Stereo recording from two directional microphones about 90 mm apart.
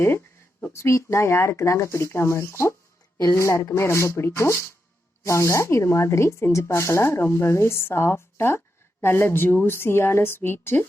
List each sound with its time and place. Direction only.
0.6 s speech: 30° left (ahead or behind)